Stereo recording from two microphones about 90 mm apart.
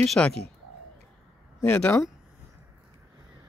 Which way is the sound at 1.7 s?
10° left (ahead or behind).